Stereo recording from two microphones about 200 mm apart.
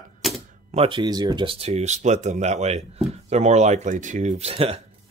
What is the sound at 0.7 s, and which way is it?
Speech, 25° right (ahead or behind).